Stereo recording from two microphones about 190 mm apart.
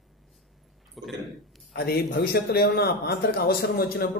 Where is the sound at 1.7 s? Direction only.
55° left (ahead or behind).